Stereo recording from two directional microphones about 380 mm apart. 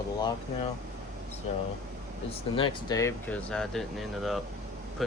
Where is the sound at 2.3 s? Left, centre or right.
Centre.